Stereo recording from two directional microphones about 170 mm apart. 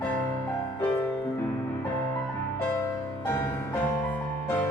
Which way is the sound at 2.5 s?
15° left (ahead or behind).